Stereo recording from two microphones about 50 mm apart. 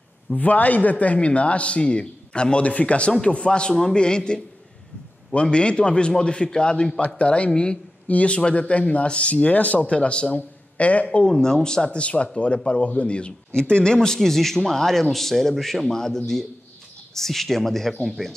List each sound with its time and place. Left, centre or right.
0.3 s speech: left
11.3 s speech: centre